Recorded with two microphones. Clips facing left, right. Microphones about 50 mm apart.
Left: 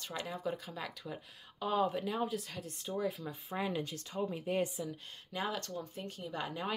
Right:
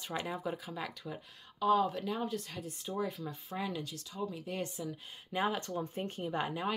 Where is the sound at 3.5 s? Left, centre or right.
Left.